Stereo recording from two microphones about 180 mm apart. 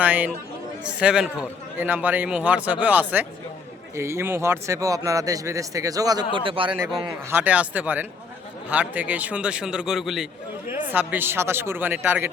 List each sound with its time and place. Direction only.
0.0 s a man's voice: 10° right (ahead or behind); by 6.7 s 30° right (ahead or behind)
7.3 s speech: 10° right (ahead or behind)